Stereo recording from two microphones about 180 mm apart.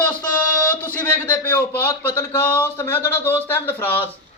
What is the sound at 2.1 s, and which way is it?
Speech, 10° left (ahead or behind).